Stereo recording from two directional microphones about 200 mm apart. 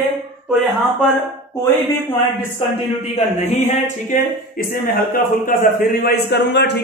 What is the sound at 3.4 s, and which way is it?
Speech, 35° left (ahead or behind).